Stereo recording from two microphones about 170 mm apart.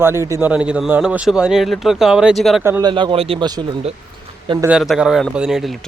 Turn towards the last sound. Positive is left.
turn(degrees=0)  # may be behind; listen again after turning